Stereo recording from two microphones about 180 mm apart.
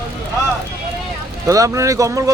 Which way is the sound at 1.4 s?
20° right (ahead or behind).